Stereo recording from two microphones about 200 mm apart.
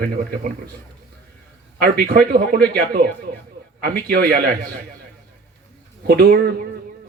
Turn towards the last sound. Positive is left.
turn(degrees=-50)  # may be behind; listen again after turning